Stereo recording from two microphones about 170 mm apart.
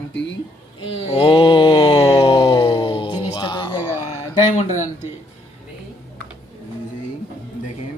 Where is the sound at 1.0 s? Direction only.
30° left (ahead or behind).